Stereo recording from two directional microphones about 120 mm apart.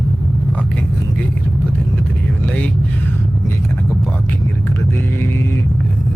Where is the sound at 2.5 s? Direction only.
10° left (ahead or behind).